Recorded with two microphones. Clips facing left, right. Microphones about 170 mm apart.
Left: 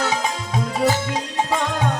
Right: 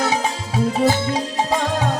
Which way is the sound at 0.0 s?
35° right (ahead or behind).